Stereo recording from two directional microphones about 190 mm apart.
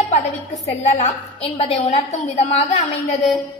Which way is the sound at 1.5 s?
30° left (ahead or behind).